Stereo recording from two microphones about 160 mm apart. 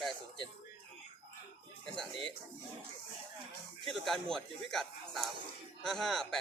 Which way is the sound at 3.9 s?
Centre (ahead or behind).